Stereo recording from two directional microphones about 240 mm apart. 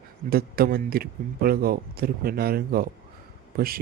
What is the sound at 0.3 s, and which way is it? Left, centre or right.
Speech, right.